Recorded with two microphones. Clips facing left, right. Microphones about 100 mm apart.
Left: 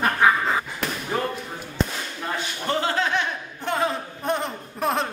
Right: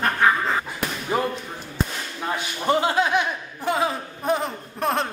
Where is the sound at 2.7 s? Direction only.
15° right (ahead or behind).